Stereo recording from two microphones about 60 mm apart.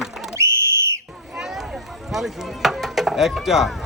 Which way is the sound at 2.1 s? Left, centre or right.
Centre.